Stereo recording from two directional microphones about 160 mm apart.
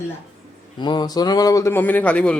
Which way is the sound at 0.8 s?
25° left (ahead or behind).